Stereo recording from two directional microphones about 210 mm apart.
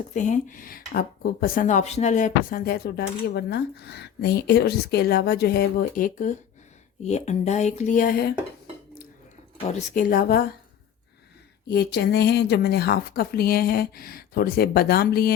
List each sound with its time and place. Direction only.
0.1 s speech: 35° left (ahead or behind)
9.6 s speech: 35° left (ahead or behind)
11.7 s speech: 50° left (ahead or behind)